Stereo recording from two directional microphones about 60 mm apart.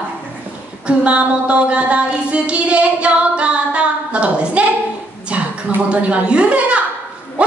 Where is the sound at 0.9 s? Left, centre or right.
Centre.